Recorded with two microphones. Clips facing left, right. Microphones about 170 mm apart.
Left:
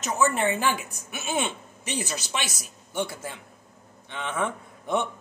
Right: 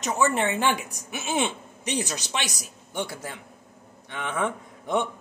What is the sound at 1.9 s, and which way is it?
Speech, 15° right (ahead or behind).